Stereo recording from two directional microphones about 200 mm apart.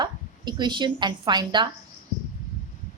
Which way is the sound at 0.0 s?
20° right (ahead or behind).